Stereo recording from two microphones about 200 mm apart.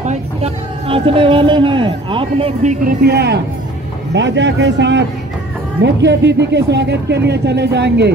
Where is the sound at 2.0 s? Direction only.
25° right (ahead or behind).